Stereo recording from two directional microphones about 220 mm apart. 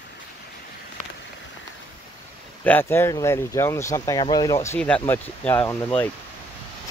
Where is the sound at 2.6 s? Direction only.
10° left (ahead or behind).